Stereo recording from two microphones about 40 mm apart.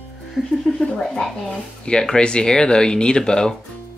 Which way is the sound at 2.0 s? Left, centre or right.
Left.